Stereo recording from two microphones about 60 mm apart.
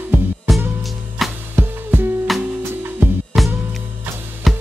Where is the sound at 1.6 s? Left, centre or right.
Right.